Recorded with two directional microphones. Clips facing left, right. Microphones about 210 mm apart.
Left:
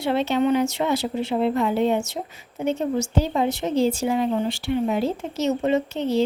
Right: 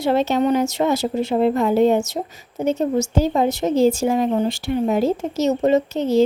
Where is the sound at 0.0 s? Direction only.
40° right (ahead or behind).